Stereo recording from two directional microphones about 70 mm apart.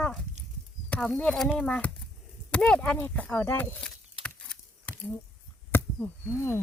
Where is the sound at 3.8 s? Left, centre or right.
Centre.